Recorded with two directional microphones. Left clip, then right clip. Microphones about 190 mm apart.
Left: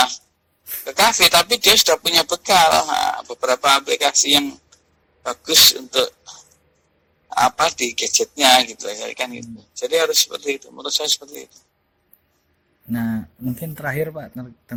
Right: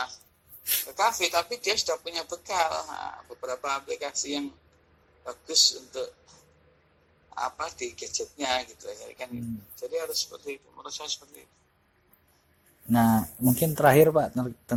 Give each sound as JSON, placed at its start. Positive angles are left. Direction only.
{"t": 0.9, "sound": "speech", "side_deg": 45}
{"t": 12.9, "sound": "speech", "side_deg": -10}